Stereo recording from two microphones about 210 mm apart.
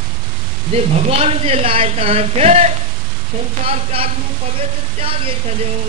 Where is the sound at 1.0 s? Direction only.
30° right (ahead or behind).